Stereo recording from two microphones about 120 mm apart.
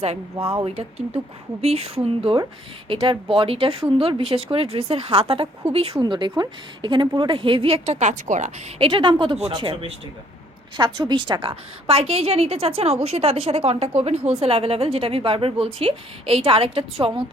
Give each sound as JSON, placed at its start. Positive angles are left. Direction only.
{"t": 0.6, "sound": "a woman's voice", "side_deg": -60}
{"t": 6.0, "sound": "a woman's voice", "side_deg": -40}
{"t": 8.8, "sound": "a woman's voice", "side_deg": -40}